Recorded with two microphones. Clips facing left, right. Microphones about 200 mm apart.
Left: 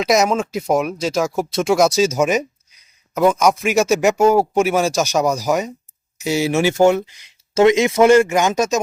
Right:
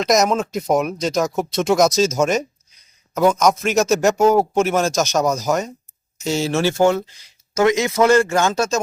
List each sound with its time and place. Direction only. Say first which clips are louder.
0.0 s a man's voice: left 1 dB; 5° left (ahead or behind)